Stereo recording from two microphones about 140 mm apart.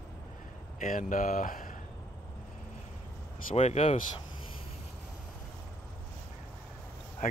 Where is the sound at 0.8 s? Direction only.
75° left (ahead or behind).